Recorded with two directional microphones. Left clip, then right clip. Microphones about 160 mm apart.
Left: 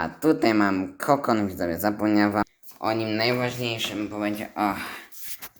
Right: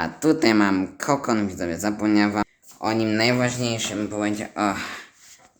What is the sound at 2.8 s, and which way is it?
Speech, 20° right (ahead or behind).